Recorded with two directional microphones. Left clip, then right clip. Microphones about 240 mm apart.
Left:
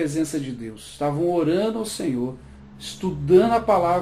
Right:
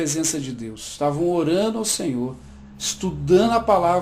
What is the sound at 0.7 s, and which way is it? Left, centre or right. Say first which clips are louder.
Speech: right 3 dB; right.